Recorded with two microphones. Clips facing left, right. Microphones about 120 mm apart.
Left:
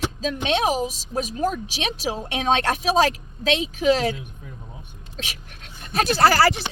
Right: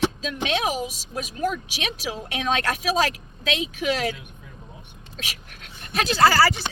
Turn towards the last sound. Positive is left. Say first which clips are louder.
# left 1 dB
turn(degrees=50)  # may be behind; listen again after turning